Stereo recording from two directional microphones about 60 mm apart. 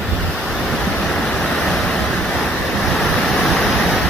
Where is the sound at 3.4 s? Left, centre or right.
Centre.